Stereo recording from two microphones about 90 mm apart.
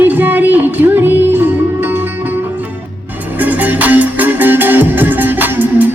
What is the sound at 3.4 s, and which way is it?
Music, 15° right (ahead or behind).